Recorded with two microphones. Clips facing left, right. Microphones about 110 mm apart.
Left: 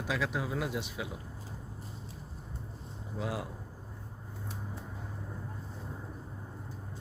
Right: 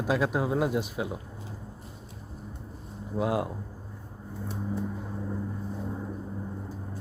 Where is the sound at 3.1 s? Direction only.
60° right (ahead or behind).